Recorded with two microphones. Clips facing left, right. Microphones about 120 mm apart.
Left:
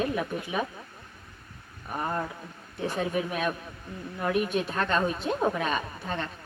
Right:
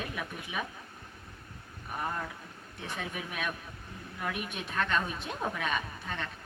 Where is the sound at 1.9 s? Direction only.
45° left (ahead or behind).